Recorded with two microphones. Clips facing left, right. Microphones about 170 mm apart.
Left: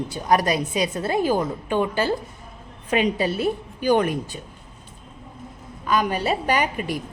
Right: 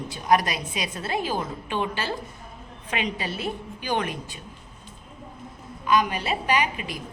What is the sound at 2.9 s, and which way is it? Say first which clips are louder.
A woman's voice: left 8 dB; 40° left (ahead or behind).